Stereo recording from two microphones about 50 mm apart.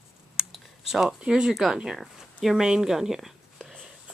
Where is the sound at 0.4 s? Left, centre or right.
Centre.